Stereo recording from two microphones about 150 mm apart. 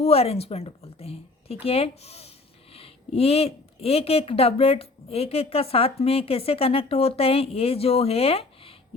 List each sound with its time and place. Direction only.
0.0 s speech: 40° left (ahead or behind)